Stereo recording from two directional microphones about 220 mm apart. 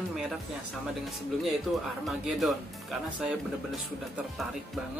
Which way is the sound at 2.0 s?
Centre (ahead or behind).